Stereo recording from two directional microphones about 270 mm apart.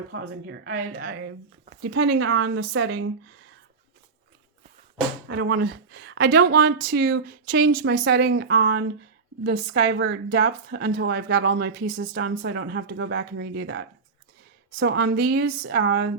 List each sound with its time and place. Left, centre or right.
0.1 s speech: right
5.3 s speech: right